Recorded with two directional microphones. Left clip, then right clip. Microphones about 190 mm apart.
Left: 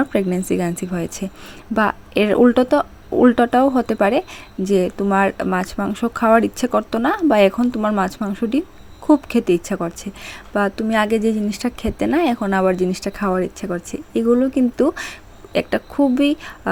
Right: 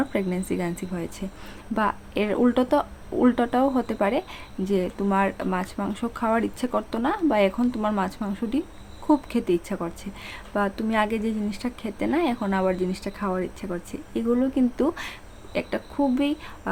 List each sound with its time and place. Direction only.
0.0 s a woman's voice: 30° left (ahead or behind)